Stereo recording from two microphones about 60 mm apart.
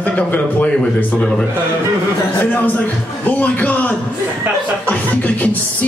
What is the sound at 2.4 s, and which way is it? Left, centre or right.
A man's voice, left.